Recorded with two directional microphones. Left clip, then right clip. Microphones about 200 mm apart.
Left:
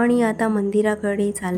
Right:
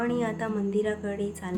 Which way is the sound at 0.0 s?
45° left (ahead or behind).